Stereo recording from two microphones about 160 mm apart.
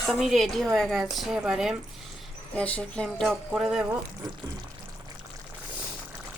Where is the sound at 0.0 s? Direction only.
Centre (ahead or behind).